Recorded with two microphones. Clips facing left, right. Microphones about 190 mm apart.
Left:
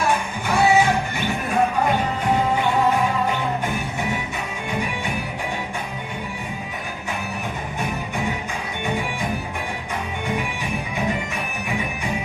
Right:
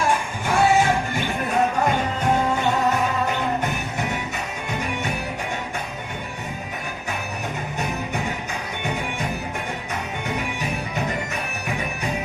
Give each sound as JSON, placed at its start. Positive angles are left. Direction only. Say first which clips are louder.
{"t": 0.4, "sound": "music", "louder": "left 1 dB", "side_deg": -45}